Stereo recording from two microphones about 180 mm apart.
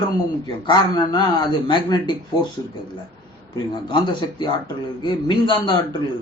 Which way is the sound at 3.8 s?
25° left (ahead or behind).